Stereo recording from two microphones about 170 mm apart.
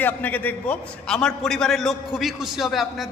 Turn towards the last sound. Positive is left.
turn(degrees=0)  # may be behind; listen again after turning